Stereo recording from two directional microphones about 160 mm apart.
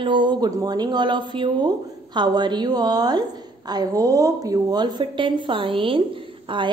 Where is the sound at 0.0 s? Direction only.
30° right (ahead or behind).